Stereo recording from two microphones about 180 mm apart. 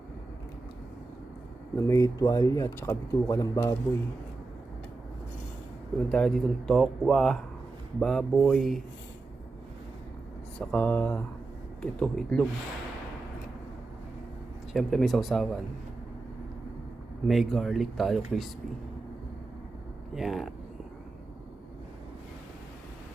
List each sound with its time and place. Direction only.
1.9 s speech: 20° left (ahead or behind)
6.1 s speech: 5° left (ahead or behind)
10.6 s speech: 5° left (ahead or behind)
14.7 s speech: centre (ahead or behind)
17.2 s speech: centre (ahead or behind)
20.1 s speech: centre (ahead or behind)